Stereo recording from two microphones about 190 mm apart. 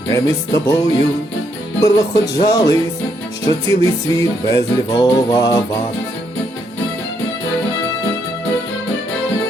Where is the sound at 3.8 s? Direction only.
15° left (ahead or behind).